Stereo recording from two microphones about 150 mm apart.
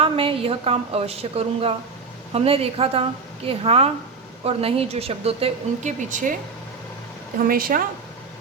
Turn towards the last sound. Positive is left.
turn(degrees=-75)  # may be behind; listen again after turning